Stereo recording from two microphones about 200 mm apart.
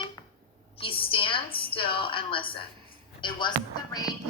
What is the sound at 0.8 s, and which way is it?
Speech, 25° left (ahead or behind).